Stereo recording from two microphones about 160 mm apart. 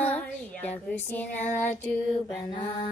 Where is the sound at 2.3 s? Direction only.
20° left (ahead or behind).